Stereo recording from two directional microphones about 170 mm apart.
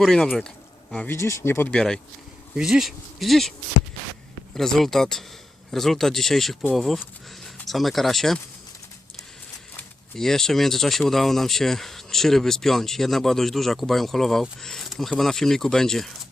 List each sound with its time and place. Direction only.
0.0 s speech: centre (ahead or behind)
4.5 s speech: centre (ahead or behind)
9.7 s speech: 5° left (ahead or behind)